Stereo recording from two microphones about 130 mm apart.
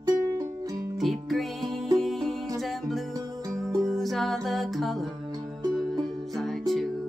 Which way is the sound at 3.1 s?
25° right (ahead or behind).